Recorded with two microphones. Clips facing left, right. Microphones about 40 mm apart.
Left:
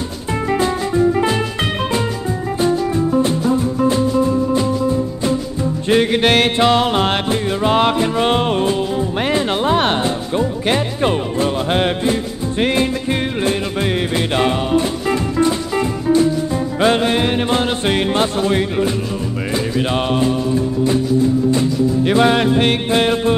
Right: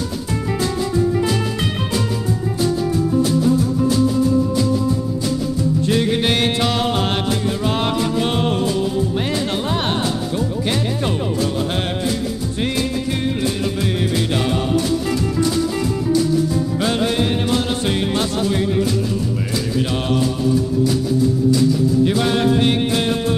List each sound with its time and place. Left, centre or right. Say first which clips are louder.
2.6 s music: left 3 dB; left
14.1 s music: left 3 dB; left